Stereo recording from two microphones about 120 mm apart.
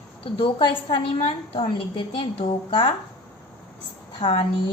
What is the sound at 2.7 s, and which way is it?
Speech, 45° left (ahead or behind).